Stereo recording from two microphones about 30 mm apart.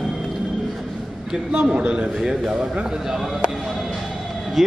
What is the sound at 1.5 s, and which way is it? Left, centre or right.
Speech, right.